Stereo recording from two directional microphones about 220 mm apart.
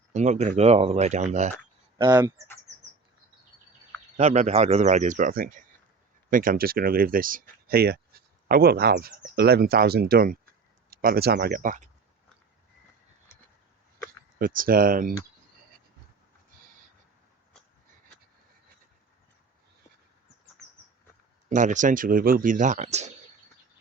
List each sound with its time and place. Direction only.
0.1 s speech: 30° right (ahead or behind)
4.2 s speech: 30° right (ahead or behind)
14.3 s speech: 40° right (ahead or behind)
16.6 s a sound: 40° right (ahead or behind)
21.5 s speech: 35° right (ahead or behind)